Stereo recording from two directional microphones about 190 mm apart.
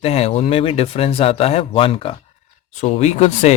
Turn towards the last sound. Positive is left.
turn(degrees=35)  # may be behind; listen again after turning